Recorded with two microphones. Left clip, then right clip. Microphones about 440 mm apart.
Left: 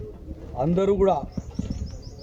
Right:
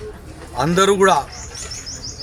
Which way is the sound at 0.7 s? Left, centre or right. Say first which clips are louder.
Right 7 dB; centre.